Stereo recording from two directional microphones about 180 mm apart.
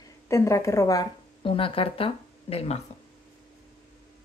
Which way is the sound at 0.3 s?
15° left (ahead or behind).